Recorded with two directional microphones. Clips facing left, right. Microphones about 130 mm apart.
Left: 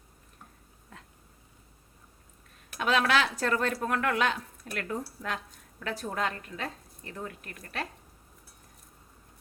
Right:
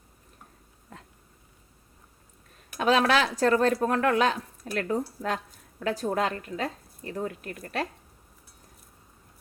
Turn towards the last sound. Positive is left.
turn(degrees=-35)  # may be behind; listen again after turning